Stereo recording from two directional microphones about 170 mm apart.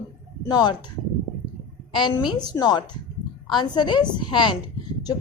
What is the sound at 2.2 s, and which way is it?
A woman's voice, 25° left (ahead or behind).